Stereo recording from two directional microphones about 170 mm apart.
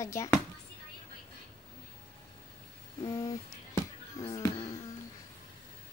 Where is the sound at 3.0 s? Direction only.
20° left (ahead or behind).